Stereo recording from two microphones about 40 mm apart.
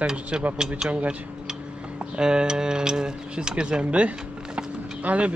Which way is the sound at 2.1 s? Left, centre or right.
Right.